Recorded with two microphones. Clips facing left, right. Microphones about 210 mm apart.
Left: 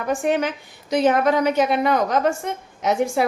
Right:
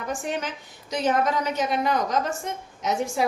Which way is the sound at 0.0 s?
60° left (ahead or behind).